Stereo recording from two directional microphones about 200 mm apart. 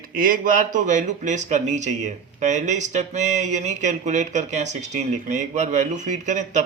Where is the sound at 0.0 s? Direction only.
45° right (ahead or behind).